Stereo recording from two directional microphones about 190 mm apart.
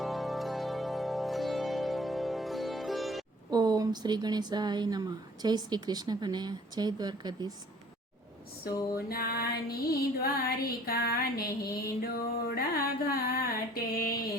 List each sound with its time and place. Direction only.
0.0 s music: centre (ahead or behind)
3.5 s a woman's voice: 20° right (ahead or behind)
8.6 s music: 50° left (ahead or behind)
13.1 s a sound: 50° left (ahead or behind)